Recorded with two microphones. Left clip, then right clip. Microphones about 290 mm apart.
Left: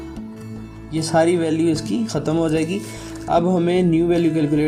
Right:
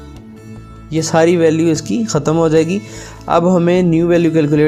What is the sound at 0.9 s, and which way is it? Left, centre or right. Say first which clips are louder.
Speech: right 5 dB; right.